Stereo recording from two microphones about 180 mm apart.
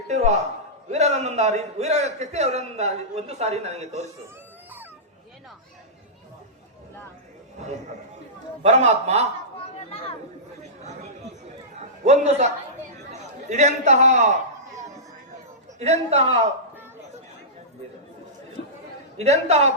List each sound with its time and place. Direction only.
0.1 s a man's voice: 40° right (ahead or behind)
8.6 s a man's voice: 40° right (ahead or behind)
9.9 s speech: 30° left (ahead or behind)
12.0 s a man's voice: 40° right (ahead or behind)
15.8 s a man's voice: 35° right (ahead or behind)
19.1 s a man's voice: 35° right (ahead or behind)